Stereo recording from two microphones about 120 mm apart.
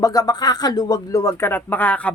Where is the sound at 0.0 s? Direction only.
30° left (ahead or behind).